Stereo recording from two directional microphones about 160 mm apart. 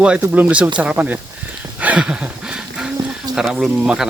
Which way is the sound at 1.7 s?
10° right (ahead or behind).